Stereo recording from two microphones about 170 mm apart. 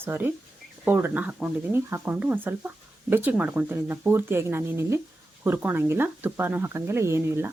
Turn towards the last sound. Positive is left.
turn(degrees=-15)  # may be behind; listen again after turning